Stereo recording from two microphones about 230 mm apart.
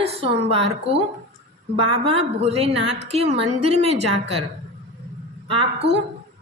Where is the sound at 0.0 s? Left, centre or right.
Right.